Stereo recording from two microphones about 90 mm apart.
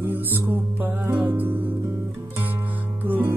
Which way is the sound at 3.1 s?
20° right (ahead or behind).